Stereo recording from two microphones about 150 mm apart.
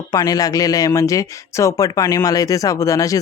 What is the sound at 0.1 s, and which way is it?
Speech, 25° left (ahead or behind).